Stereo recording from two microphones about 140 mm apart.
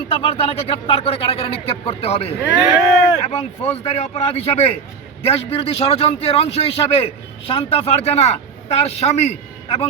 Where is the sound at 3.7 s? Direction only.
50° left (ahead or behind).